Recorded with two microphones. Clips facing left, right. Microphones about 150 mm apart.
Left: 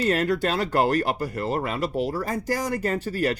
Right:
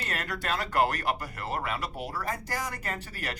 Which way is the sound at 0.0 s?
30° left (ahead or behind).